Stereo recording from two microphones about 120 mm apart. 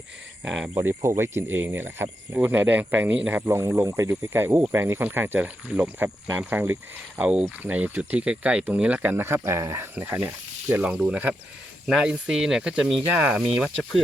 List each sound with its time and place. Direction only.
0.7 s speech: 20° right (ahead or behind)
3.4 s speech: 25° right (ahead or behind); by 13.7 s 10° right (ahead or behind)